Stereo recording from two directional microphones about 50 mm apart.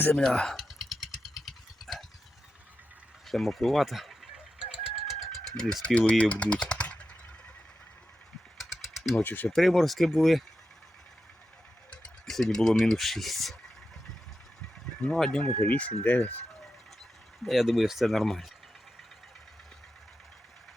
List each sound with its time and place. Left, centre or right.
0.2 s speech: centre
0.5 s motorcycle: centre
3.2 s speech: centre
5.0 s vehicle: centre
5.8 s speech: left
8.5 s a sound: centre
9.2 s speech: left
9.6 s speech: centre
11.9 s a sound: centre
13.0 s speech: centre
15.1 s speech: centre
15.4 s speech: left
17.4 s speech: centre